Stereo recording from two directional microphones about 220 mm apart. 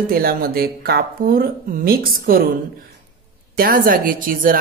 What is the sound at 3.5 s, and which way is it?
Speech, 40° right (ahead or behind).